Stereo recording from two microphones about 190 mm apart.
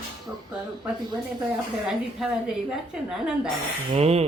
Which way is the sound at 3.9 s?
35° right (ahead or behind).